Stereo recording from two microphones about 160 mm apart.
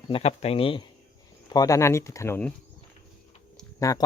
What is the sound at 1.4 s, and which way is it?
Speech, 25° left (ahead or behind).